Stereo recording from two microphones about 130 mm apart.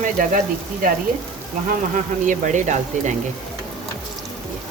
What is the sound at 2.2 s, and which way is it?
Speech, 75° right (ahead or behind).